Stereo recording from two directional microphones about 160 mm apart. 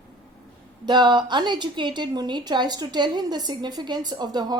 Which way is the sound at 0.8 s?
30° right (ahead or behind).